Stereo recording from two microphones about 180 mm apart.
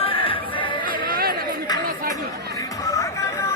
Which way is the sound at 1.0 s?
55° right (ahead or behind).